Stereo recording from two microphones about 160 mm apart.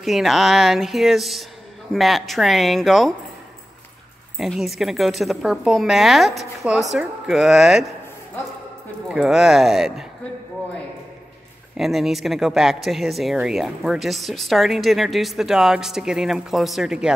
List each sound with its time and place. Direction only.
0.0 s speech: centre (ahead or behind)
4.4 s speech: centre (ahead or behind)
9.1 s speech: centre (ahead or behind)
11.7 s speech: centre (ahead or behind)